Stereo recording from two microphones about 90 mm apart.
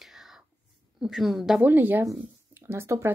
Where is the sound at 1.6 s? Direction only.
20° right (ahead or behind).